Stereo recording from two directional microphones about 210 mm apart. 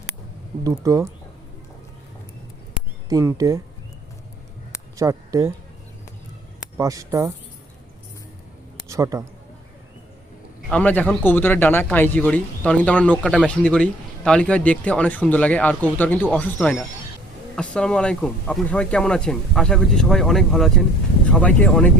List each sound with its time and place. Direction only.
0.6 s speech: 15° right (ahead or behind)
3.1 s speech: 15° right (ahead or behind)
4.9 s speech: 15° right (ahead or behind)
6.7 s speech: 15° right (ahead or behind)
8.9 s speech: 15° right (ahead or behind)
10.7 s a man's voice: 5° left (ahead or behind)